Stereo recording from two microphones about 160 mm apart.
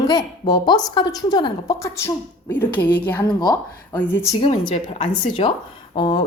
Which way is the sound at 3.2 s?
25° left (ahead or behind).